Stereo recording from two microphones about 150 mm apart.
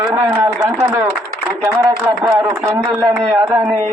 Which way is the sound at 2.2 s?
15° right (ahead or behind).